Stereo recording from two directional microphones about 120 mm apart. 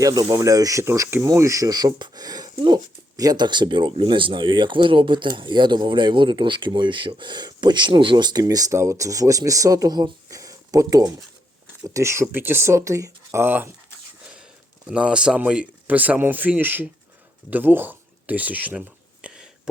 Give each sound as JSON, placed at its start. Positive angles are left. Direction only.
{"t": 0.0, "sound": "speech", "side_deg": -30}
{"t": 11.9, "sound": "speech", "side_deg": -20}
{"t": 14.8, "sound": "speech", "side_deg": -10}
{"t": 17.5, "sound": "a sound", "side_deg": -15}